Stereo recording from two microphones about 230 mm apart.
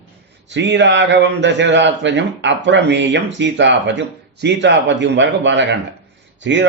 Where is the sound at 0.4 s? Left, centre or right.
Right.